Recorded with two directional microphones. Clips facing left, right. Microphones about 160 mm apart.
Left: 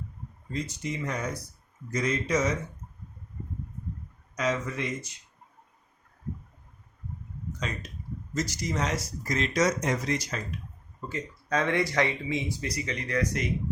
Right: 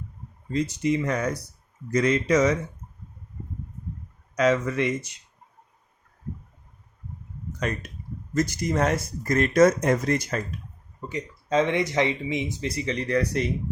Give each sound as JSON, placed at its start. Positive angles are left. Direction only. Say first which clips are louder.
{"t": 0.5, "sound": "speech", "louder": "right 9 dB", "side_deg": -70}
{"t": 4.4, "sound": "speech", "louder": "right 7 dB", "side_deg": -70}
{"t": 7.6, "sound": "speech", "louder": "right 7 dB", "side_deg": -60}
{"t": 11.1, "sound": "speech", "louder": "right 5 dB", "side_deg": -20}